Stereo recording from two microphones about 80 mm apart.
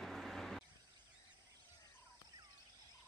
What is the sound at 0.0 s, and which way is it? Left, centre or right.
Vehicle, centre.